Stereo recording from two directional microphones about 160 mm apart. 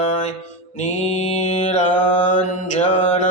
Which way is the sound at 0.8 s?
45° left (ahead or behind).